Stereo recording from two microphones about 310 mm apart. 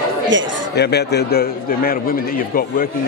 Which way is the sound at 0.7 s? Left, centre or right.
Left.